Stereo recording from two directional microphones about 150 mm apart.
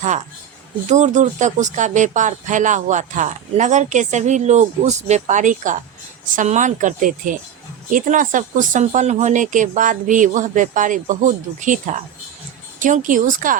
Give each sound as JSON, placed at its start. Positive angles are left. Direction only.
{"t": 0.9, "sound": "speech", "side_deg": -50}